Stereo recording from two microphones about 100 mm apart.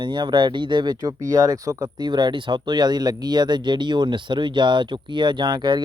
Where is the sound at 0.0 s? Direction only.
50° right (ahead or behind); by 1.9 s 35° right (ahead or behind).